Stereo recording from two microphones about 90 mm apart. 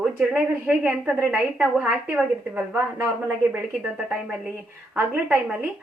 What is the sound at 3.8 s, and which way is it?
A woman's voice, 10° right (ahead or behind).